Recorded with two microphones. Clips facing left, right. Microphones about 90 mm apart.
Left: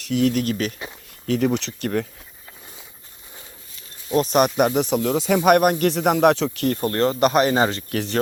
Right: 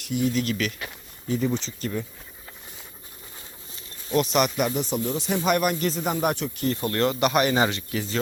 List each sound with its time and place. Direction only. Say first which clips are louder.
0.1 s speech: left 5 dB; 85° left
0.3 s speech: left 3 dB; 40° left (ahead or behind)
1.3 s speech: left 5 dB; 75° left (ahead or behind)
4.1 s speech: left 4 dB; 40° left (ahead or behind)
5.0 s speech: left 8 dB; 90° left; by 5.7 s 55° left (ahead or behind)
5.8 s speech: left 8 dB; 70° left (ahead or behind); by 6.7 s 85° left
6.7 s speech: left 3 dB; 35° left (ahead or behind)
7.9 s speech: left 5 dB; 60° left (ahead or behind)